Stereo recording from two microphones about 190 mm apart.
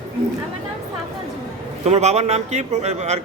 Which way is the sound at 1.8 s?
35° right (ahead or behind).